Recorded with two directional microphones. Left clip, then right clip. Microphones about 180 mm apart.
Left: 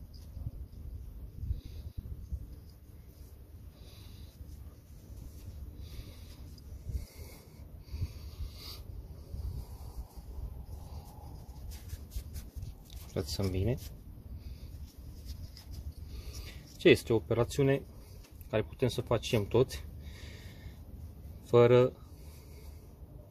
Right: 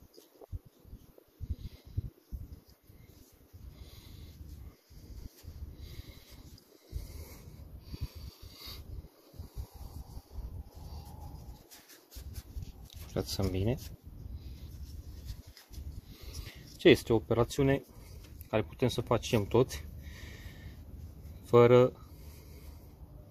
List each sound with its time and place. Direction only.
13.1 s speech: 20° right (ahead or behind)
16.3 s speech: 15° right (ahead or behind)
21.5 s speech: 25° right (ahead or behind)